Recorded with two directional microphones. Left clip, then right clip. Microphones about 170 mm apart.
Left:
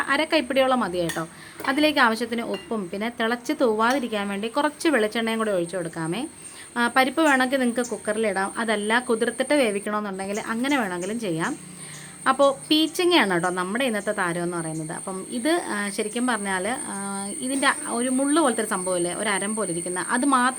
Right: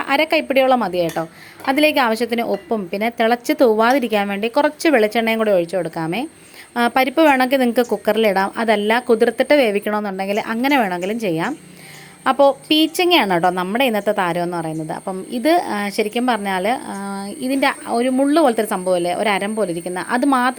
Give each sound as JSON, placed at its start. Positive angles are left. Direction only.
{"t": 0.0, "sound": "a woman's voice", "side_deg": -25}